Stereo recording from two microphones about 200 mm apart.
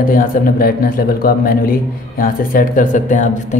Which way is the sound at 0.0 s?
45° left (ahead or behind).